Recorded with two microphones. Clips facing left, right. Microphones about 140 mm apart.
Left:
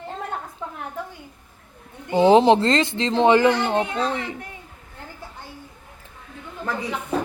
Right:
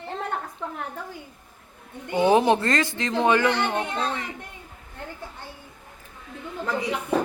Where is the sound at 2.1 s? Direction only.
25° left (ahead or behind).